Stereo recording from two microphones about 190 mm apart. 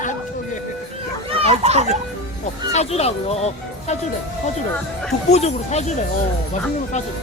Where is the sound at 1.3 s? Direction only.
30° right (ahead or behind).